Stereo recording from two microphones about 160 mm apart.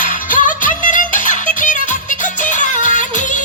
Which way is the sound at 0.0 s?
55° left (ahead or behind).